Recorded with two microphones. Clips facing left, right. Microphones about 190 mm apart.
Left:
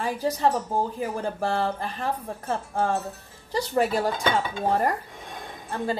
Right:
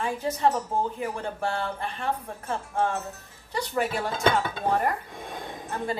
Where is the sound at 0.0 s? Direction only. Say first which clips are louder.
Left 1 dB; 35° left (ahead or behind).